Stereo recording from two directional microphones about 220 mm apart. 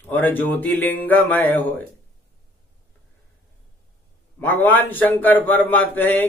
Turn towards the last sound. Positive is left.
turn(degrees=10)  # may be behind; listen again after turning